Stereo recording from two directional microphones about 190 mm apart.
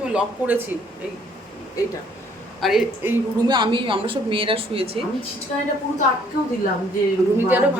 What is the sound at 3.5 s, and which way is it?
A woman's voice, 25° right (ahead or behind).